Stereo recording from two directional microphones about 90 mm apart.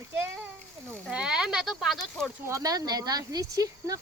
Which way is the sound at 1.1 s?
10° right (ahead or behind).